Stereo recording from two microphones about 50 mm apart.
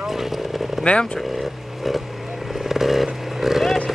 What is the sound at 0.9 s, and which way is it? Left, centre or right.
Speech, left.